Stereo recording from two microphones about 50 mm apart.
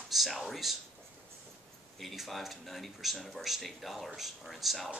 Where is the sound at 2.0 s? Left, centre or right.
Centre.